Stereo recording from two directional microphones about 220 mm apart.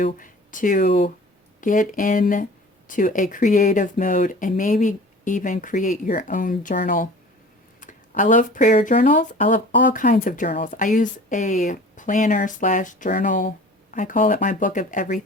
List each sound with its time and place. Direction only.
0.0 s speech: 40° left (ahead or behind)